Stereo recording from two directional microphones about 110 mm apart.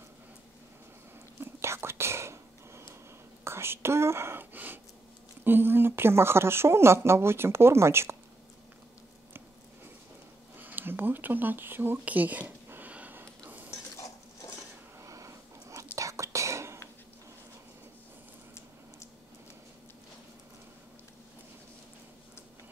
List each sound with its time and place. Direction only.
1.4 s whispering: 25° right (ahead or behind)
5.4 s speech: 20° right (ahead or behind)
10.6 s a sound: 15° right (ahead or behind)
13.5 s dishes: 15° right (ahead or behind)
15.0 s a sound: 30° right (ahead or behind)
16.0 s whispering: 30° right (ahead or behind)